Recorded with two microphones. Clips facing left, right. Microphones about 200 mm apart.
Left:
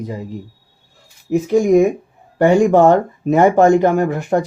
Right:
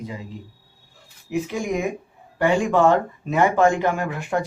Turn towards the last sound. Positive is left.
turn(degrees=45)  # may be behind; listen again after turning